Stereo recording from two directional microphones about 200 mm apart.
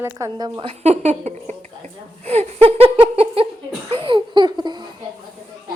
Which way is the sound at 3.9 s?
25° right (ahead or behind).